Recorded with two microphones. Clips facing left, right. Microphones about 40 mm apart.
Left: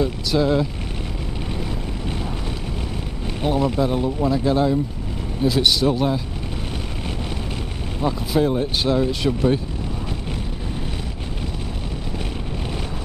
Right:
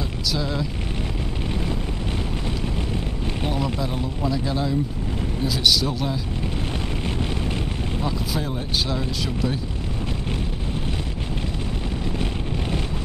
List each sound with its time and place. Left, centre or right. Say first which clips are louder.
0.0 s vehicle: left 7 dB; left
3.4 s speech: left 7 dB; centre
8.0 s speech: left 9 dB; centre